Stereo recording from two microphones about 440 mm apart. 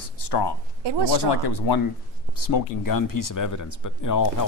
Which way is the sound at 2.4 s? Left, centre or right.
Left.